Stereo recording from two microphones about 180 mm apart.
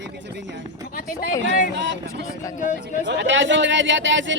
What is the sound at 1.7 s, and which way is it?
Speech, 75° right (ahead or behind).